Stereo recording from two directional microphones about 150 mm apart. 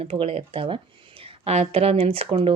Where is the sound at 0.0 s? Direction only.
40° right (ahead or behind).